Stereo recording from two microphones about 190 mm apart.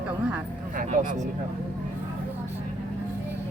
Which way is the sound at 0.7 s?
45° right (ahead or behind).